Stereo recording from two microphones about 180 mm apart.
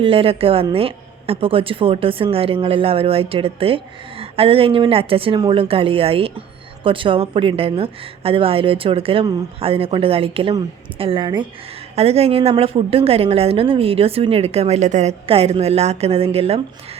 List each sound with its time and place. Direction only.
0.0 s a woman's voice: 30° right (ahead or behind)